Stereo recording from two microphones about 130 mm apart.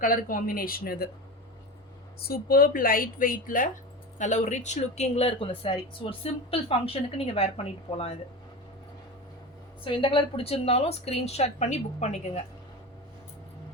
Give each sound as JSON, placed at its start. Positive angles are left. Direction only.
{"t": 0.0, "sound": "speech", "side_deg": 90}
{"t": 2.7, "sound": "speech", "side_deg": 90}
{"t": 4.2, "sound": "speech", "side_deg": 70}
{"t": 9.8, "sound": "speech", "side_deg": 40}